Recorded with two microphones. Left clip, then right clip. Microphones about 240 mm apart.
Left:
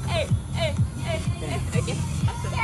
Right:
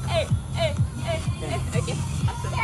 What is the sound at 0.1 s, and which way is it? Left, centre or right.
Music, centre.